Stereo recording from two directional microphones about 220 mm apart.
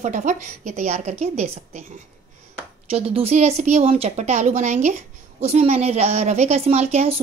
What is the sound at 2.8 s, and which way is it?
A woman's voice, 25° right (ahead or behind).